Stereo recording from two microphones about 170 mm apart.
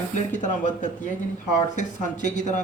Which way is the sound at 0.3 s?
45° left (ahead or behind).